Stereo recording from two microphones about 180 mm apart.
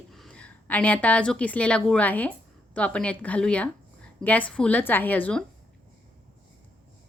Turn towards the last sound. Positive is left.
turn(degrees=10)  # may be behind; listen again after turning